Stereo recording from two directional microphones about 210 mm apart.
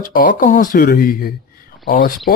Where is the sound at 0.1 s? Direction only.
40° left (ahead or behind).